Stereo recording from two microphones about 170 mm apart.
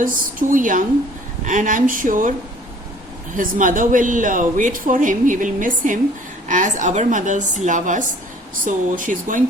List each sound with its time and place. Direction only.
0.0 s speech: 55° right (ahead or behind)
3.3 s speech: 50° right (ahead or behind)